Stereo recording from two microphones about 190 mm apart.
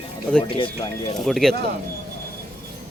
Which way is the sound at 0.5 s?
25° left (ahead or behind).